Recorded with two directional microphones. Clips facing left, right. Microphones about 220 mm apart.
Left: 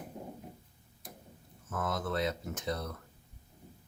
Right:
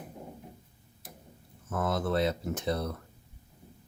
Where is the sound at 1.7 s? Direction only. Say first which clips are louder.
Right 5 dB; 35° right (ahead or behind).